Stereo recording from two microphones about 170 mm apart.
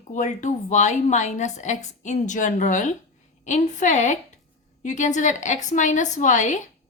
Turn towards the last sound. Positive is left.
turn(degrees=45)  # may be behind; listen again after turning